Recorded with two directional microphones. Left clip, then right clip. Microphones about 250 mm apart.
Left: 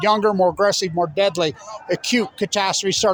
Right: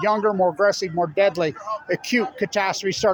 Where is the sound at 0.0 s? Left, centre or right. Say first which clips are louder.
Left 3 dB; left.